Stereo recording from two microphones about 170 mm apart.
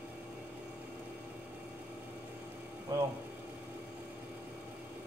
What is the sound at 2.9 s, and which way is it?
Speech, 20° right (ahead or behind).